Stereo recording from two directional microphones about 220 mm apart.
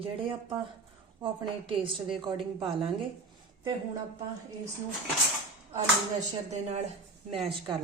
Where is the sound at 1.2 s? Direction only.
25° right (ahead or behind).